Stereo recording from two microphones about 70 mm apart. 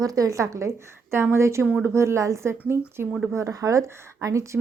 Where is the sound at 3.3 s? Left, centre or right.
Right.